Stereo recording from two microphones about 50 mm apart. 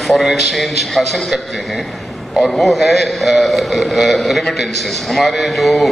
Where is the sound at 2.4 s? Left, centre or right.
Centre.